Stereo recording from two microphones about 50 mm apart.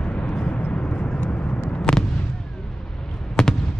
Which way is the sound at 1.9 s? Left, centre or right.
Left.